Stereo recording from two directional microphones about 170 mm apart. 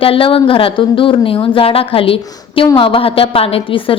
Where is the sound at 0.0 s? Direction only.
30° left (ahead or behind).